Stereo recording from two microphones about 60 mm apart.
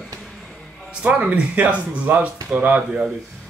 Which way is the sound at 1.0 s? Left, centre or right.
Right.